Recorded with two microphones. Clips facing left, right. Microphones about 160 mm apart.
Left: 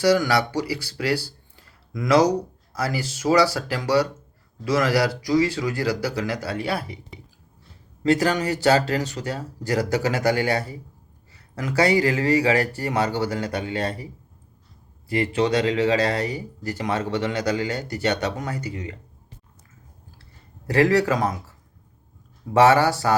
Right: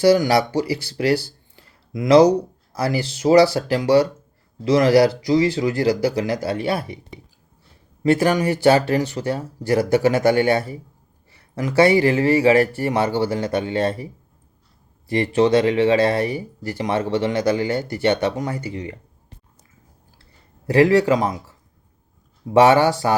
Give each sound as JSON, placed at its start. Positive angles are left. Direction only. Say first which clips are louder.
{"t": 0.3, "sound": "speech", "louder": "right 4 dB", "side_deg": -30}
{"t": 8.2, "sound": "speech", "louder": "right 4 dB", "side_deg": -20}
{"t": 15.1, "sound": "speech", "louder": "right 5 dB", "side_deg": -30}
{"t": 20.7, "sound": "speech", "louder": "right 4 dB", "side_deg": -20}
{"t": 22.5, "sound": "speech", "louder": "right 3 dB", "side_deg": -20}